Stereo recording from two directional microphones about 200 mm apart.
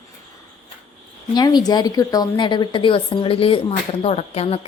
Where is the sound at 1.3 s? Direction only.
20° left (ahead or behind).